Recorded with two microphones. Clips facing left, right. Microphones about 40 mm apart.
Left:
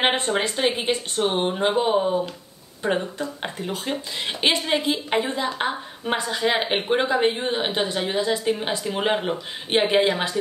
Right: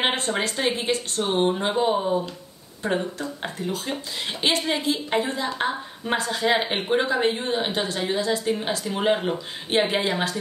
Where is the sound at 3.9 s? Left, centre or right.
Centre.